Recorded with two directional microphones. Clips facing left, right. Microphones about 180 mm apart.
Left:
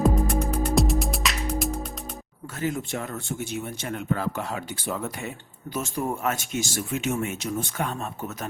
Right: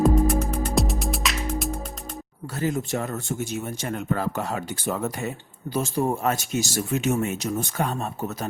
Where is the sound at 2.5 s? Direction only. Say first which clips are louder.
Right 3 dB; 35° right (ahead or behind).